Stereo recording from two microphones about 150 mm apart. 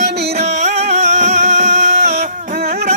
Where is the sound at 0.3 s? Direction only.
45° right (ahead or behind).